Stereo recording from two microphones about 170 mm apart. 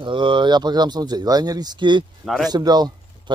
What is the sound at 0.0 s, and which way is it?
Speech, 30° right (ahead or behind).